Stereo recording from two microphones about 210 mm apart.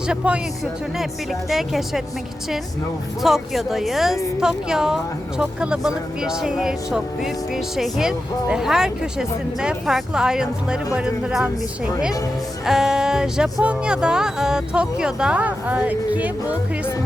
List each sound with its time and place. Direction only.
0.1 s speech: centre (ahead or behind)
3.2 s speech: centre (ahead or behind)
12.6 s speech: centre (ahead or behind)